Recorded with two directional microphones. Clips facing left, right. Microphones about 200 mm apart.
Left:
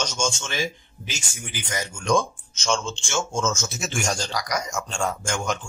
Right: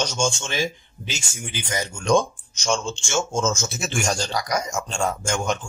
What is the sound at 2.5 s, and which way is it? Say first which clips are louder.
Speech: right 1 dB; 15° right (ahead or behind).